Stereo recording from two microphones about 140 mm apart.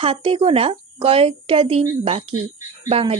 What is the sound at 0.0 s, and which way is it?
A woman's voice, 40° right (ahead or behind).